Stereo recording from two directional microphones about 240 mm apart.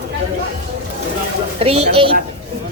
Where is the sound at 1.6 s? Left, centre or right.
Right.